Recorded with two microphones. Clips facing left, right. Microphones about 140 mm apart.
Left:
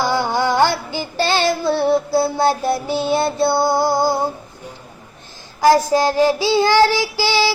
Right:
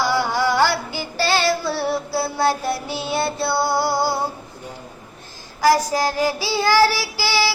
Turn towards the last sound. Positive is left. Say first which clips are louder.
# left 4 dB
turn(degrees=20)  # may be behind; listen again after turning